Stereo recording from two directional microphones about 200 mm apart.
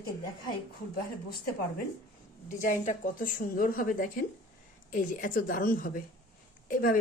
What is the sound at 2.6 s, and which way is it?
A woman's voice, 40° left (ahead or behind).